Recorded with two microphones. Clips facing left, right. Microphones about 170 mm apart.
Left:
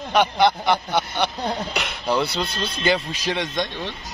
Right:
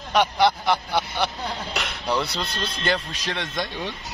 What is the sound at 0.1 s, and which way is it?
Speech, centre (ahead or behind).